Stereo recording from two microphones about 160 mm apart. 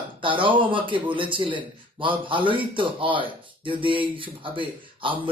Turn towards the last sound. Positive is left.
turn(degrees=-30)  # may be behind; listen again after turning